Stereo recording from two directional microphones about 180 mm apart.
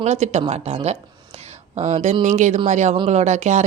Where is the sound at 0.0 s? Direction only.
40° right (ahead or behind).